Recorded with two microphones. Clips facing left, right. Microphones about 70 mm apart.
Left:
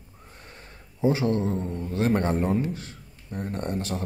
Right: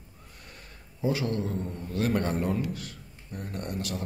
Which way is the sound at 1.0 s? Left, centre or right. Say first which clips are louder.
Left 5 dB; left.